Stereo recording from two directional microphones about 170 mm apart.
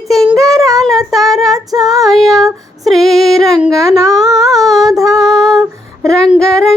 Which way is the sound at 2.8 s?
Centre (ahead or behind).